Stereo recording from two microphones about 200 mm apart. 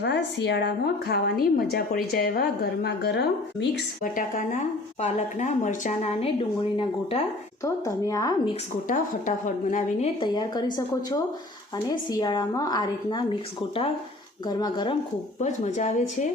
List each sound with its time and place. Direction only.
0.0 s a woman's voice: 60° left (ahead or behind); by 7.3 s 30° left (ahead or behind)
7.6 s speech: 15° left (ahead or behind)
8.9 s a woman's voice: 40° left (ahead or behind)
10.2 s a woman's voice: 20° left (ahead or behind)
14.4 s a woman's voice: 20° left (ahead or behind)
15.4 s a woman's voice: 35° left (ahead or behind)